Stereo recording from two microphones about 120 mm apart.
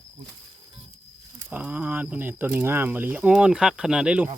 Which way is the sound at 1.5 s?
10° right (ahead or behind).